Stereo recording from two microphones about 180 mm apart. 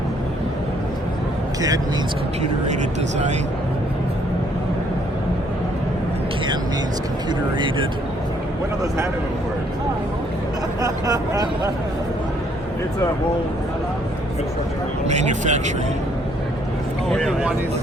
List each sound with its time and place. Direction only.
7.3 s speech: 25° right (ahead or behind)
10.8 s speech: 20° right (ahead or behind)
15.0 s speech: 40° right (ahead or behind)
17.1 s speech: centre (ahead or behind)